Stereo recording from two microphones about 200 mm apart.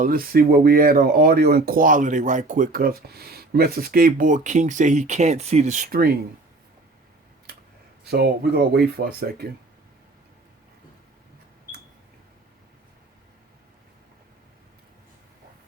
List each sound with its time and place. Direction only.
0.0 s speech: 45° right (ahead or behind)
8.0 s speech: 50° right (ahead or behind)